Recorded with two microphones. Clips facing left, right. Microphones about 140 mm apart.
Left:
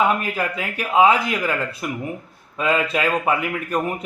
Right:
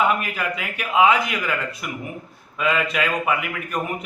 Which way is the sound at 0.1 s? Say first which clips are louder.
Left 2 dB; 35° left (ahead or behind).